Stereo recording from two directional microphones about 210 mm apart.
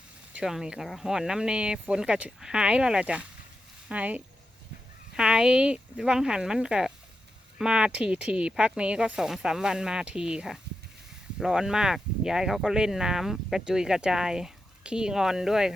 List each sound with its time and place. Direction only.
0.3 s speech: 5° right (ahead or behind)